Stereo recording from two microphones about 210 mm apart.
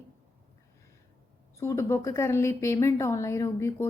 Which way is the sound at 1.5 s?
15° left (ahead or behind).